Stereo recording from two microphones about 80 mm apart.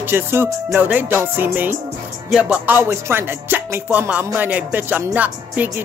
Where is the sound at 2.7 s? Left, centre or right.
Right.